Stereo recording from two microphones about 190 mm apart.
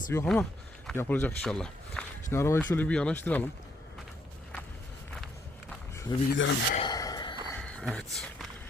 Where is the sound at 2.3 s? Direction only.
15° left (ahead or behind).